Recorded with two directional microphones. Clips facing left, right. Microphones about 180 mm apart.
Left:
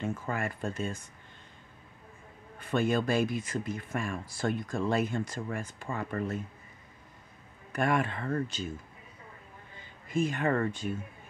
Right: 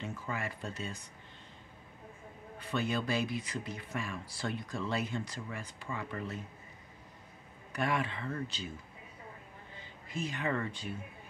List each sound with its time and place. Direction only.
0.0 s speech: 50° left (ahead or behind)
2.6 s speech: 50° left (ahead or behind)
7.7 s speech: 50° left (ahead or behind)
10.0 s speech: 50° left (ahead or behind)